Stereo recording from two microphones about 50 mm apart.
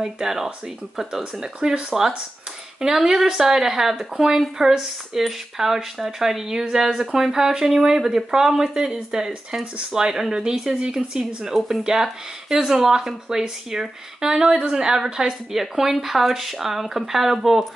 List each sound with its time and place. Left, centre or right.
0.0 s speech: centre
11.5 s speech: centre
15.6 s speech: centre